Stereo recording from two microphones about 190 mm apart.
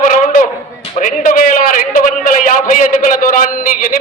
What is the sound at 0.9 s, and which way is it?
A man's voice, 45° left (ahead or behind).